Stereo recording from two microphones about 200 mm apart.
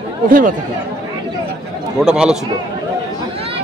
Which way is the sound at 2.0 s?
5° right (ahead or behind).